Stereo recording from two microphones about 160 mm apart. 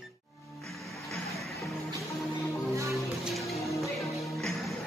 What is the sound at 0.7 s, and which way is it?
Music, centre (ahead or behind).